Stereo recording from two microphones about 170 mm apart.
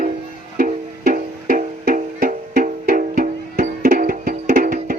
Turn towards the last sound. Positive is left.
turn(degrees=-55)  # may be behind; listen again after turning